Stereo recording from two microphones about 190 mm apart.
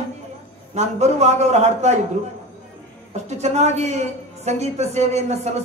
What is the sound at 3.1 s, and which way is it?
A woman's voice, 35° right (ahead or behind).